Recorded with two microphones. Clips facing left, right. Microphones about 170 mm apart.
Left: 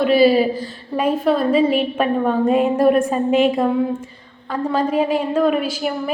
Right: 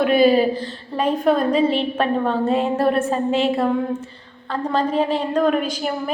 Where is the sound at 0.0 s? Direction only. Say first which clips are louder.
Left 1 dB; 5° left (ahead or behind).